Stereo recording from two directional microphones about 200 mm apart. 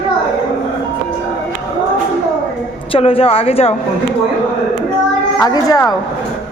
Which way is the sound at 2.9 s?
25° left (ahead or behind).